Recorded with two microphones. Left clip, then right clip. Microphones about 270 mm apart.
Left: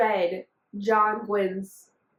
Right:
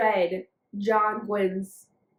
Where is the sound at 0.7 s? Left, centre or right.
Centre.